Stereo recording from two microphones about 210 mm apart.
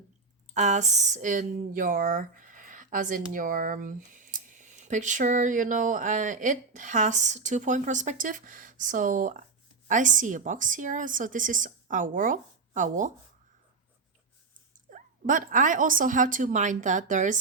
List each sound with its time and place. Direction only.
0.5 s speech: 35° right (ahead or behind)
14.8 s speech: 40° right (ahead or behind)